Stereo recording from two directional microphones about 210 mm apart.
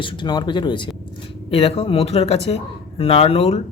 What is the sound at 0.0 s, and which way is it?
Speech, 25° left (ahead or behind).